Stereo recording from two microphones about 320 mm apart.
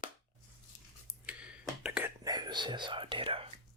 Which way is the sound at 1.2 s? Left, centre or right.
Centre.